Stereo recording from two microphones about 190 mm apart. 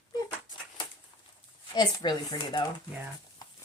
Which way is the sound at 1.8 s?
25° left (ahead or behind).